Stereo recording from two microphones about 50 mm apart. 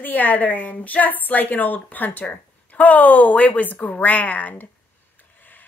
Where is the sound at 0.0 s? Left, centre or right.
Left.